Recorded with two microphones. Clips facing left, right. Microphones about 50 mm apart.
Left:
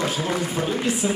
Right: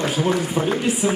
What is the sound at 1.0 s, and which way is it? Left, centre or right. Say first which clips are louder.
Speech: right 4 dB; centre.